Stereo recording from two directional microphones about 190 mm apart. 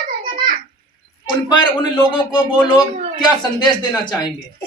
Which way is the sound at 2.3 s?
20° left (ahead or behind).